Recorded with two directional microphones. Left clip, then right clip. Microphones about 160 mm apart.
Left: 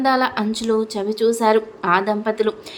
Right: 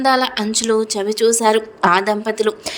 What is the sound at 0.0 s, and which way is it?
A woman's voice, 50° right (ahead or behind).